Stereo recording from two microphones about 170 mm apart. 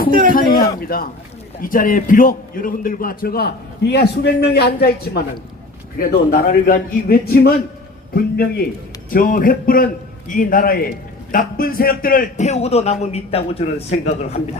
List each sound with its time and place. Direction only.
0.1 s a man's voice: 55° right (ahead or behind)
0.3 s a man's voice: 55° left (ahead or behind); by 14.3 s 40° left (ahead or behind)